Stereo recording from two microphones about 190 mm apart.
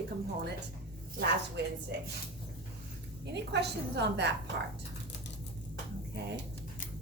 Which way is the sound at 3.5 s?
60° right (ahead or behind).